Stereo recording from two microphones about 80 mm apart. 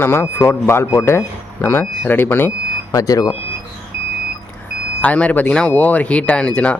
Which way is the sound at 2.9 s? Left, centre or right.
Left.